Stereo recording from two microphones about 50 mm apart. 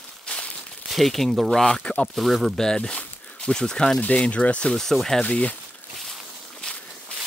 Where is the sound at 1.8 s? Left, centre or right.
Left.